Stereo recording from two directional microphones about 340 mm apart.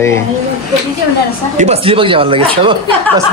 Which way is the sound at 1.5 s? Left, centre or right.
Centre.